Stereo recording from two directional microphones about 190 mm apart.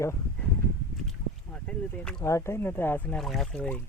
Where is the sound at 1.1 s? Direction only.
5° left (ahead or behind).